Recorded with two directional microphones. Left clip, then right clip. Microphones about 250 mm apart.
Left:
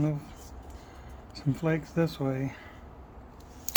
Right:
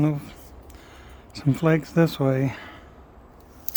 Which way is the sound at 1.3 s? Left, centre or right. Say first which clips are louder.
Right 8 dB; right.